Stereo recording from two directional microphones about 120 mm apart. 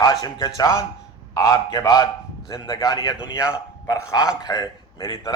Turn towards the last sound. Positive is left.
turn(degrees=30)  # may be behind; listen again after turning